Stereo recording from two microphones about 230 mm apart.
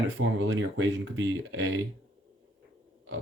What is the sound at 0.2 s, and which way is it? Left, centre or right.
Speech, right.